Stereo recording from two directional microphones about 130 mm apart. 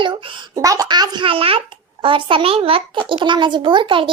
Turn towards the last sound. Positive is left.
turn(degrees=-40)  # may be behind; listen again after turning